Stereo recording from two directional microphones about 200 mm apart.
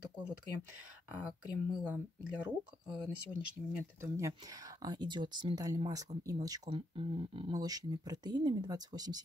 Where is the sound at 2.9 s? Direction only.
5° right (ahead or behind).